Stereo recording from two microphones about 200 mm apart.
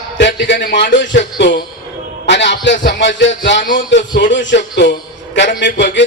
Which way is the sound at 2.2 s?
65° left (ahead or behind).